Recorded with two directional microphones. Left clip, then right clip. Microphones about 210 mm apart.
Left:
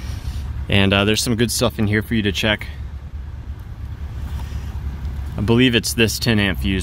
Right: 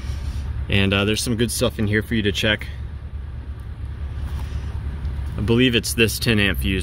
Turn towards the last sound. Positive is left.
turn(degrees=25)  # may be behind; listen again after turning